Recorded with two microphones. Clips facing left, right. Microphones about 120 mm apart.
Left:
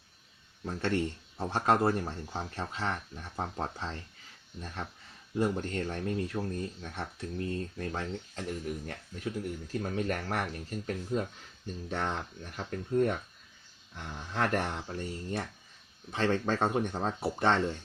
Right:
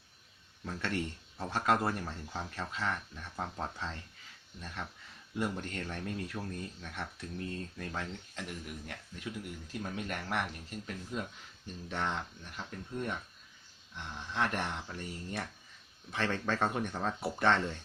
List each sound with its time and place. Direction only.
0.6 s speech: 30° left (ahead or behind)